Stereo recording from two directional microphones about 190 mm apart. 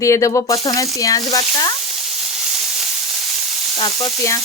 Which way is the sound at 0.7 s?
15° left (ahead or behind).